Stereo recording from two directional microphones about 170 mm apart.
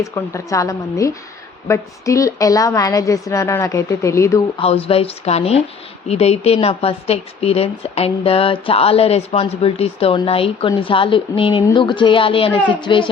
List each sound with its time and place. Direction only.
0.0 s a woman's voice: 20° left (ahead or behind)
4.5 s a woman's voice: 35° left (ahead or behind)